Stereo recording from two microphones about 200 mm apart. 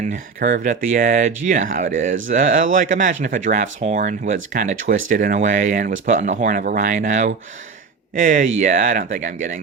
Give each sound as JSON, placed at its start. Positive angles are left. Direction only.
{"t": 0.0, "sound": "speech", "side_deg": -40}